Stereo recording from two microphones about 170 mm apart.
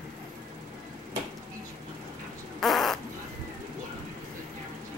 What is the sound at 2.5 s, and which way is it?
Fart, centre (ahead or behind).